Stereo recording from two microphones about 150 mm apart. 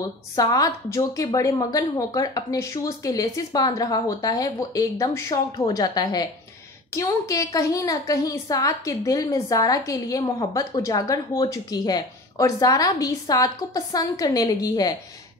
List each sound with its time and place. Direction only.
0.4 s a woman's voice: 25° left (ahead or behind)